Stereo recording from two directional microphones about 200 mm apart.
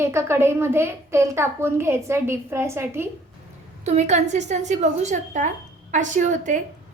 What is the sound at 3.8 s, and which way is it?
A woman's voice, 35° right (ahead or behind).